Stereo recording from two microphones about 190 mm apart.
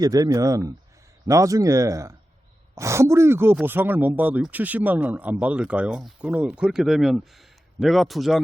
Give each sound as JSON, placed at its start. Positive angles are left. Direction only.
{"t": 0.0, "sound": "speech", "side_deg": -20}